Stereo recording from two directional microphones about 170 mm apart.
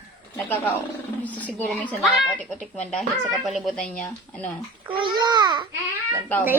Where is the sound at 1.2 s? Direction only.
10° left (ahead or behind).